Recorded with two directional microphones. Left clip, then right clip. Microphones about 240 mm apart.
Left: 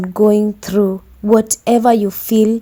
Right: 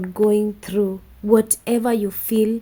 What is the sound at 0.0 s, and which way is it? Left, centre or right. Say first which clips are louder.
A woman's voice: left 5 dB; left.